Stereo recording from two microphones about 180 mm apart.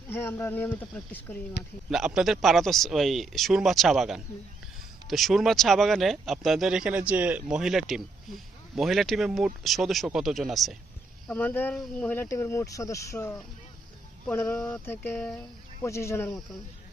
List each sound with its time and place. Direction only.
0.1 s speech: 10° left (ahead or behind)
1.9 s speech: 5° right (ahead or behind); by 14.5 s 15° left (ahead or behind)
14.5 s speech: 5° left (ahead or behind)